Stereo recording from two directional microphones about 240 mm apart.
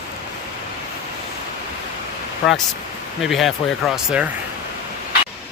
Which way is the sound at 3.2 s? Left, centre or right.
Centre.